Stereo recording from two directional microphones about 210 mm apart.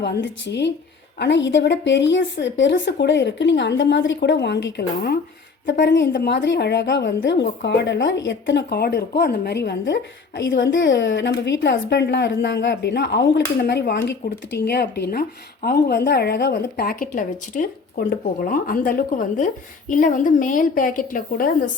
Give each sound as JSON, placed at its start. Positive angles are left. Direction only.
{"t": 0.0, "sound": "a woman's voice", "side_deg": 55}